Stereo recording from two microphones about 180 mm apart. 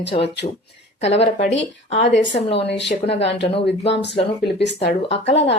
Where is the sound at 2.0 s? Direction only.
80° left.